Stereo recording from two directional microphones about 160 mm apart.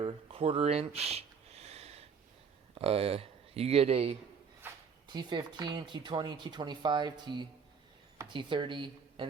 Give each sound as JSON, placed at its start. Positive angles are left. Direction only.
{"t": 0.0, "sound": "a sound", "side_deg": -35}
{"t": 2.7, "sound": "speech", "side_deg": -40}
{"t": 5.0, "sound": "a woman's voice", "side_deg": -25}